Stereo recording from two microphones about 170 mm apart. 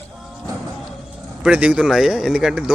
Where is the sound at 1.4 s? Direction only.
10° right (ahead or behind).